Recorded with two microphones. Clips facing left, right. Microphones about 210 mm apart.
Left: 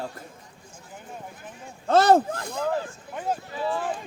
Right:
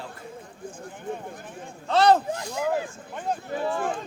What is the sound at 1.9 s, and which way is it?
Speech, 45° left (ahead or behind).